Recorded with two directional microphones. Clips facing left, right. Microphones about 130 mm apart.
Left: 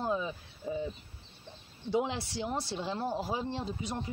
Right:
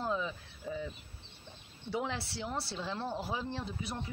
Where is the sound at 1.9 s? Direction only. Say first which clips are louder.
Left 5 dB; 15° left (ahead or behind).